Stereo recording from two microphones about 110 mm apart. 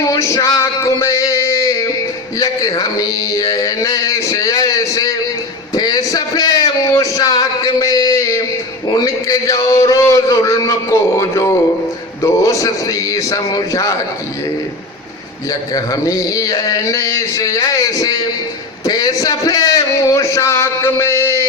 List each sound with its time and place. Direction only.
0.0 s a man's voice: 30° left (ahead or behind)
0.4 s a sound: 25° left (ahead or behind)
2.4 s speech: 35° left (ahead or behind)
5.7 s a sound: 35° left (ahead or behind)
12.2 s speech: 30° left (ahead or behind)
15.7 s a man's voice: 35° left (ahead or behind)